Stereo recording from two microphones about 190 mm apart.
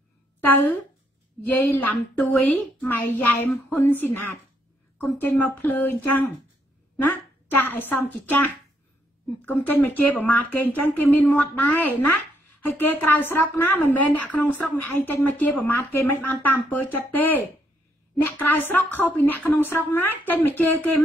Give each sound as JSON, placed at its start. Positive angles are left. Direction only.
{"t": 0.4, "sound": "a woman's voice", "side_deg": 10}
{"t": 9.5, "sound": "a woman's voice", "side_deg": 10}